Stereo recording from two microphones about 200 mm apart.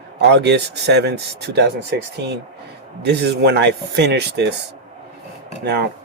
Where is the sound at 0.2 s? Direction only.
55° right (ahead or behind).